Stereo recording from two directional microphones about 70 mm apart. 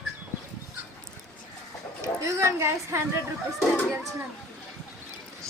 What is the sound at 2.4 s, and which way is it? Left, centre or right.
Speech, right.